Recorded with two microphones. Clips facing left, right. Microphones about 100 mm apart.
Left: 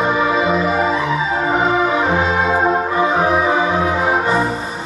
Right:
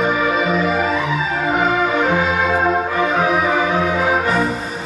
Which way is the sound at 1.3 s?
30° left (ahead or behind).